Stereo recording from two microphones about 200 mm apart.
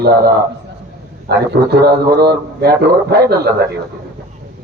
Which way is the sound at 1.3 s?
50° right (ahead or behind).